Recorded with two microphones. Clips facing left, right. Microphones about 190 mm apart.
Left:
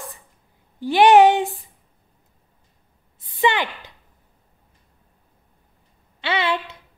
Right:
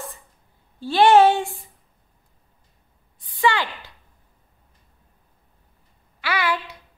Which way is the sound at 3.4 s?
20° left (ahead or behind).